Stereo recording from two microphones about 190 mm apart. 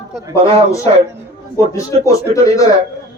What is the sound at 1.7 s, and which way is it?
Speech, 15° left (ahead or behind).